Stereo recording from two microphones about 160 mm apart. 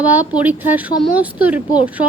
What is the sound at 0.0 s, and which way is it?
A woman's voice, 10° right (ahead or behind).